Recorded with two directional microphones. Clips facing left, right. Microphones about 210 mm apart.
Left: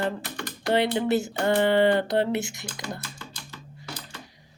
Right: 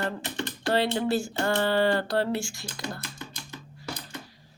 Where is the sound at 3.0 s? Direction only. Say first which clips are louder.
Right 1 dB; 20° right (ahead or behind).